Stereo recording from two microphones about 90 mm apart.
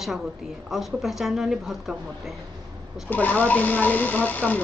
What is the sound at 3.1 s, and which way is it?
Speech, 20° left (ahead or behind).